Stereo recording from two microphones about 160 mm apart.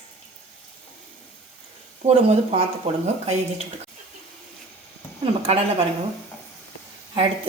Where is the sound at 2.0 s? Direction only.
40° right (ahead or behind).